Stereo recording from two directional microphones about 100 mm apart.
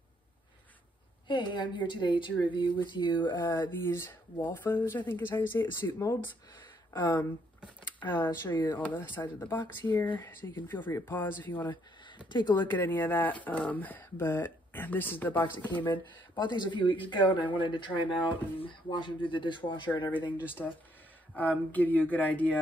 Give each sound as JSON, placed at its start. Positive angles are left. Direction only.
{"t": 1.2, "sound": "speech", "side_deg": 50}
{"t": 3.8, "sound": "speech", "side_deg": 25}
{"t": 8.0, "sound": "speech", "side_deg": 20}
{"t": 12.3, "sound": "speech", "side_deg": 50}
{"t": 12.5, "sound": "speech", "side_deg": 20}
{"t": 15.8, "sound": "speech", "side_deg": 50}
{"t": 20.6, "sound": "speech", "side_deg": 20}